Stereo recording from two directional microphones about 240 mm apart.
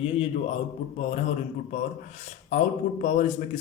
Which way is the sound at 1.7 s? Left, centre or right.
Left.